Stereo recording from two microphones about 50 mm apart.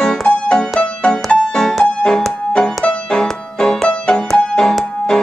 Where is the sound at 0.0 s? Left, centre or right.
Centre.